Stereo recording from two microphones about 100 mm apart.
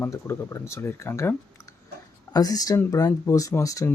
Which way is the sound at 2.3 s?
40° left (ahead or behind).